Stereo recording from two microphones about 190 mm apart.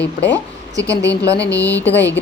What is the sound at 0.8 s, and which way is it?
Speech, 15° right (ahead or behind).